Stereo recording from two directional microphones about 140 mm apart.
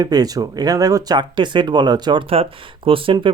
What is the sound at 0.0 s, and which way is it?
Speech, 25° right (ahead or behind).